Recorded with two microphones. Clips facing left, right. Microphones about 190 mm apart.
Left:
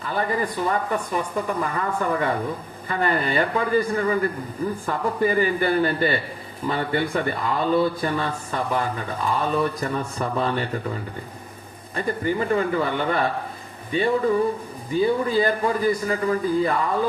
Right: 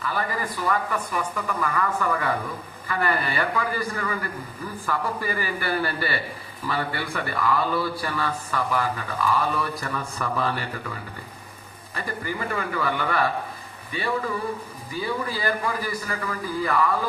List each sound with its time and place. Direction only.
0.0 s a man's voice: 25° left (ahead or behind)
11.9 s a man's voice: 25° left (ahead or behind)
14.9 s a man's voice: 20° left (ahead or behind)